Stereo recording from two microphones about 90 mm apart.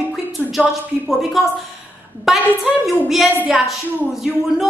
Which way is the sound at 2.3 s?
Centre (ahead or behind).